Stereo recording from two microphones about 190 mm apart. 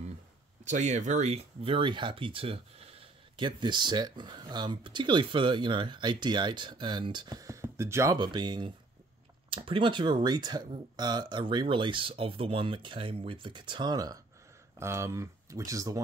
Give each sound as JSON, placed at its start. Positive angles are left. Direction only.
{"t": 0.7, "sound": "speech", "side_deg": -40}